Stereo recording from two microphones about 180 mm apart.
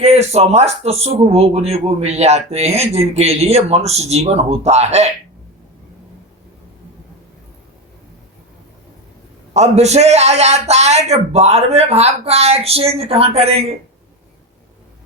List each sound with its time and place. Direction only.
0.0 s speech: 35° right (ahead or behind)
9.5 s speech: 40° right (ahead or behind)